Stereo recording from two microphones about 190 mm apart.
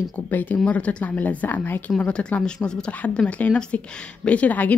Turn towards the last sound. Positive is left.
turn(degrees=10)  # may be behind; listen again after turning